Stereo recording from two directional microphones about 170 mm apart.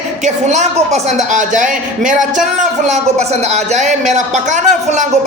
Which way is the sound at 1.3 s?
45° right (ahead or behind).